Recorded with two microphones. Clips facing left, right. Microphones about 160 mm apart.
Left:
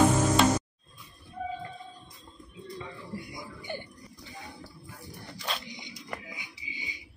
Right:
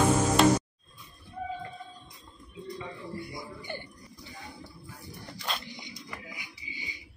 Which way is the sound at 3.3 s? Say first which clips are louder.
Even; 15° left (ahead or behind).